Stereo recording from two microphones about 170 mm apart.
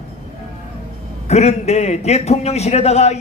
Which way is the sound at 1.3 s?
40° left (ahead or behind).